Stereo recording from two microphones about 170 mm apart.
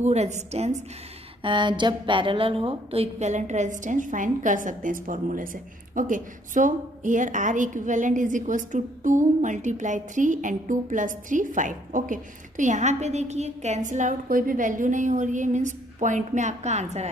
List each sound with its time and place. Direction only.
0.0 s a woman's voice: 40° right (ahead or behind)
1.4 s a woman's voice: 30° right (ahead or behind)